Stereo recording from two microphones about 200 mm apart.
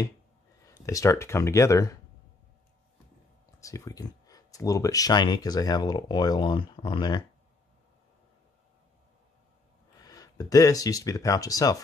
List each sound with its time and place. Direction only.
0.7 s speech: 15° left (ahead or behind)
3.6 s speech: 15° left (ahead or behind)
9.9 s speech: 15° left (ahead or behind)